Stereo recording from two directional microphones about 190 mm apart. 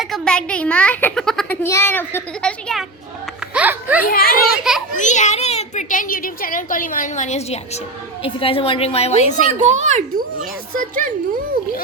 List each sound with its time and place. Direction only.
0.0 s speech: 5° left (ahead or behind)
1.6 s a child's voice: 15° left (ahead or behind)
3.5 s a child's voice: 10° right (ahead or behind)
4.0 s a child's voice: 50° left (ahead or behind)
4.9 s a child's voice: 40° left (ahead or behind)
9.5 s a child's voice: 40° right (ahead or behind)